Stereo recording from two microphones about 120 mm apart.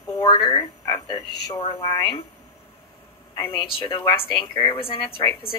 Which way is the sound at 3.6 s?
40° left (ahead or behind).